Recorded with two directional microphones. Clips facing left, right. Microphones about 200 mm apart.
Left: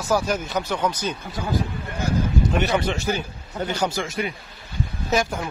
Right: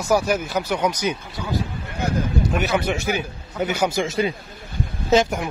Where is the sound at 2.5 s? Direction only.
5° right (ahead or behind).